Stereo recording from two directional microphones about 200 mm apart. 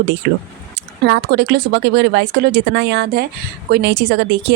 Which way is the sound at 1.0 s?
55° right (ahead or behind).